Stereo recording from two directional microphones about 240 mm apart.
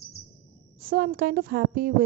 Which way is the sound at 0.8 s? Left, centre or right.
Right.